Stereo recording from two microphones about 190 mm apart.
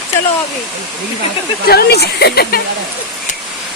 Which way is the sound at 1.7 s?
55° left (ahead or behind).